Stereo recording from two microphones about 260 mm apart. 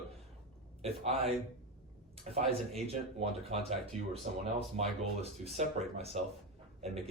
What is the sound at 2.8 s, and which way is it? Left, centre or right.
Speech, right.